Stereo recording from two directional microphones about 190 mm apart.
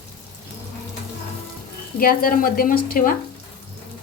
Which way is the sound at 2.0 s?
50° left (ahead or behind).